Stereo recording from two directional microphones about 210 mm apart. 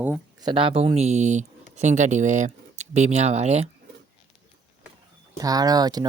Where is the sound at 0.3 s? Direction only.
20° right (ahead or behind).